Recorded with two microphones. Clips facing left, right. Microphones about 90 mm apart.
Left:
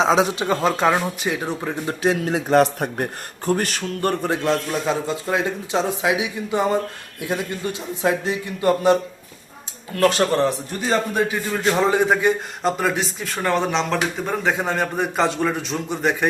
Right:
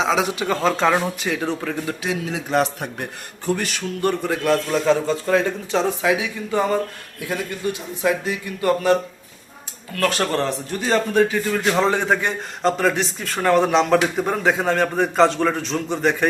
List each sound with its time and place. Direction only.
0.0 s speech: 30° left (ahead or behind); by 1.8 s 15° left (ahead or behind)
1.9 s speech: 40° left (ahead or behind)
4.4 s a man's voice: 15° left (ahead or behind)
10.8 s a man's voice: 5° left (ahead or behind)